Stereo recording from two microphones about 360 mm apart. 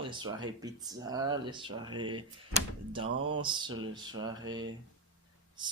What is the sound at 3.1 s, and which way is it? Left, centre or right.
Speech, right.